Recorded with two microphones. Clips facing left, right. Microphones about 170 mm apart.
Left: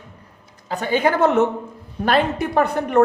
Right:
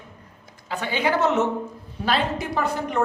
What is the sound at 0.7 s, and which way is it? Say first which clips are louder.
A woman's voice: left 4 dB; 45° left (ahead or behind).